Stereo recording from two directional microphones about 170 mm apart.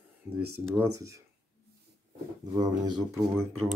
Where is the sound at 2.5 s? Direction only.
20° right (ahead or behind).